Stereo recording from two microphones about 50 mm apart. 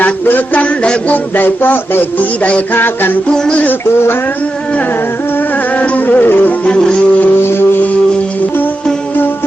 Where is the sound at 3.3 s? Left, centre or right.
Centre.